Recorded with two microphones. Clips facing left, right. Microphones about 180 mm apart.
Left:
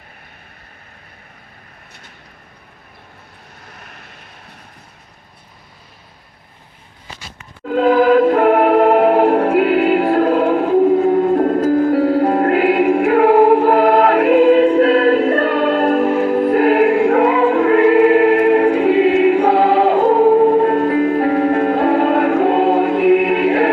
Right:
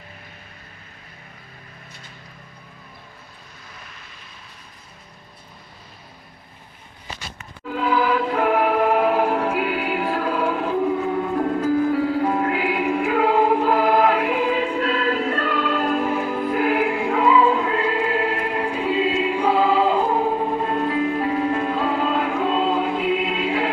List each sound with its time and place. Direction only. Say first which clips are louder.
3.7 s vehicle: left 4 dB; 65° left (ahead or behind)
7.7 s music: left 9 dB; 55° left (ahead or behind)